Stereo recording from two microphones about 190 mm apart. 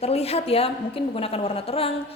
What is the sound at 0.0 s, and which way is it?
A woman's voice, 30° left (ahead or behind).